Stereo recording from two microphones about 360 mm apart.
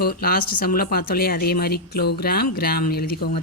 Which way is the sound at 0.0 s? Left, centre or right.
Left.